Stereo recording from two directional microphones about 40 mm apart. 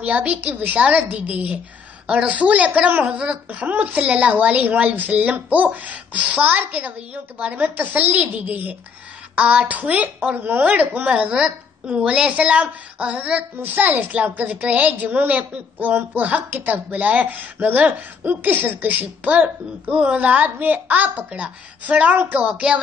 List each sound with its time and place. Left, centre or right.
0.0 s a woman's voice: right
3.1 s speech: right
3.4 s a woman's voice: right
11.1 s a woman's voice: right
11.3 s a woman's voice: centre
12.1 s a woman's voice: right
13.6 s a child's voice: right
13.9 s a woman's voice: right
15.0 s a woman's voice: right
15.8 s a child's voice: right
18.3 s a child's voice: right